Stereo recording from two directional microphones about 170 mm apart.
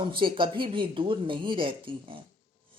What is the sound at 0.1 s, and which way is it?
Speech, 30° right (ahead or behind).